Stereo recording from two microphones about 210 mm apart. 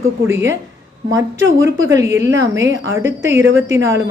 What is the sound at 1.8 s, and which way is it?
Speech, 15° right (ahead or behind).